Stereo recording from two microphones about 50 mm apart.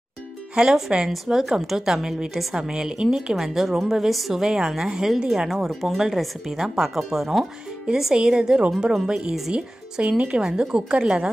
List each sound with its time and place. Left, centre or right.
0.6 s a woman's voice: centre
10.4 s a woman's voice: centre